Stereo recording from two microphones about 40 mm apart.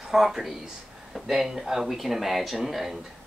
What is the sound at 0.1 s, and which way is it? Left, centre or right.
Speech, centre.